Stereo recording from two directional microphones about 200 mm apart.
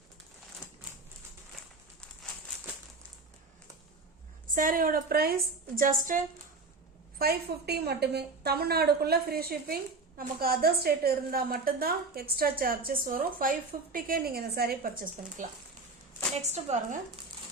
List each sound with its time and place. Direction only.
4.4 s a woman's voice: 45° right (ahead or behind)
16.4 s a woman's voice: 35° right (ahead or behind)